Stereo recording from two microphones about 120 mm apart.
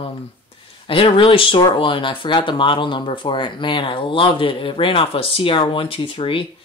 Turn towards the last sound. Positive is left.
turn(degrees=50)  # may be behind; listen again after turning